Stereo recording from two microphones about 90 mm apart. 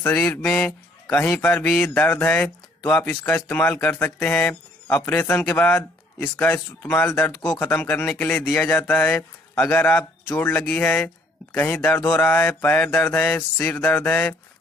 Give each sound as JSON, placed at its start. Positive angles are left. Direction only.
{"t": 0.1, "sound": "a man's voice", "side_deg": 15}